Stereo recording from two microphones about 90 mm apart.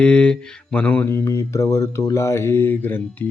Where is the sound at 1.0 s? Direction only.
30° left (ahead or behind).